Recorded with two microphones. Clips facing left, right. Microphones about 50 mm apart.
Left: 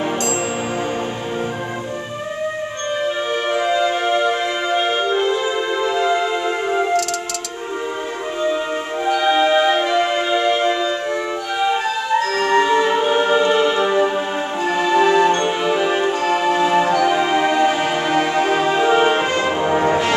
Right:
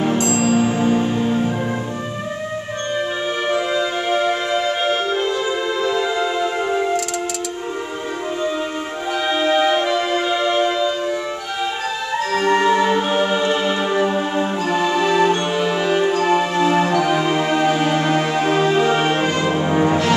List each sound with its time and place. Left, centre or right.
0.5 s music: centre
3.0 s music: centre
9.0 s music: centre
12.4 s music: centre